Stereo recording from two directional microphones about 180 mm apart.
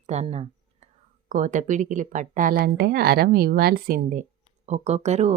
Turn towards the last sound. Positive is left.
turn(degrees=-40)  # may be behind; listen again after turning